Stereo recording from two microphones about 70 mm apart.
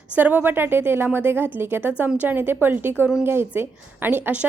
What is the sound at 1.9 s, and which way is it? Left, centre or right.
A woman's voice, centre.